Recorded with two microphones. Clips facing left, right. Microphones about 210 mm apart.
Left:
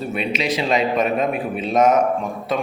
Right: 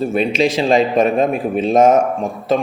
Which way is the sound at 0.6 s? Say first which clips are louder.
Right 4 dB; 30° right (ahead or behind).